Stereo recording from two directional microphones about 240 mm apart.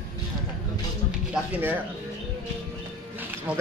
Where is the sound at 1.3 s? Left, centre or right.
Centre.